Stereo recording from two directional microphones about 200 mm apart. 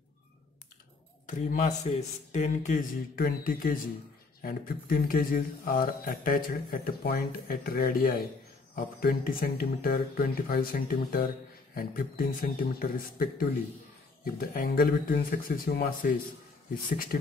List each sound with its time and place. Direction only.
1.2 s speech: 35° left (ahead or behind)